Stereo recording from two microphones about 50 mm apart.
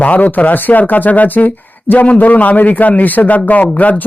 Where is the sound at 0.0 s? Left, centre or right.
Left.